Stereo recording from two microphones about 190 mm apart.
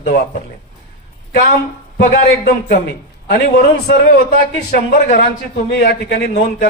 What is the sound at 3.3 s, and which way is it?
Speech, 55° left (ahead or behind).